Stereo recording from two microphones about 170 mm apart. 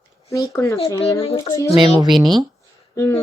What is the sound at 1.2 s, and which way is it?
Speech, 35° left (ahead or behind).